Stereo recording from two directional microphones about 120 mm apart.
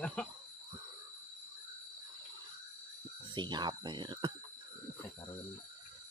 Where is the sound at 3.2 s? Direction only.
40° right (ahead or behind).